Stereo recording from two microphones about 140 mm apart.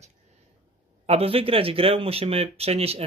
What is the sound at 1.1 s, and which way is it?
Speech, 45° right (ahead or behind).